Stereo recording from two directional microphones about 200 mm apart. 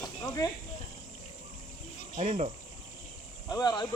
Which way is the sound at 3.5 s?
20° left (ahead or behind).